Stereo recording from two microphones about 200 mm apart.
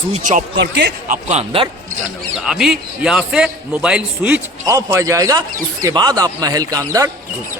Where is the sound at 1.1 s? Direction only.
35° right (ahead or behind).